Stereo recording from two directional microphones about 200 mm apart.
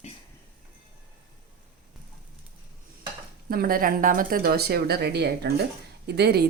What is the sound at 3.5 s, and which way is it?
Speech, 45° right (ahead or behind).